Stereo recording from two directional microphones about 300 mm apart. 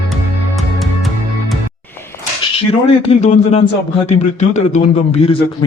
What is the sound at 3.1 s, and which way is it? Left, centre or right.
A man's voice, left.